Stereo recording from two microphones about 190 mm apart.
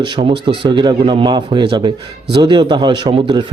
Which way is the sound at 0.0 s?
25° right (ahead or behind).